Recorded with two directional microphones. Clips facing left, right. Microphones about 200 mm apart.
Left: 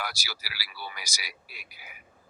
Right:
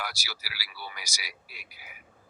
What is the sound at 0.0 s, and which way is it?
A man's voice, 40° left (ahead or behind).